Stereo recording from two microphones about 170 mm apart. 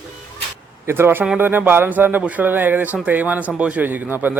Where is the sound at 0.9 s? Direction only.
15° right (ahead or behind).